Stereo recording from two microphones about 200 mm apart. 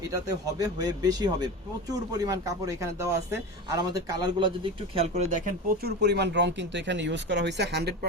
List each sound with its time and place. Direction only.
0.1 s speech: 15° right (ahead or behind); by 7.9 s 55° right (ahead or behind)